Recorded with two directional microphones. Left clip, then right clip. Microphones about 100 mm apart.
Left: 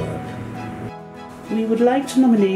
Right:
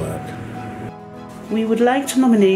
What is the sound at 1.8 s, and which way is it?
Speech, 35° right (ahead or behind).